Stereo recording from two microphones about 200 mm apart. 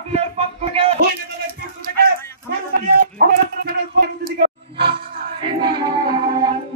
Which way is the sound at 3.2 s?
50° right (ahead or behind).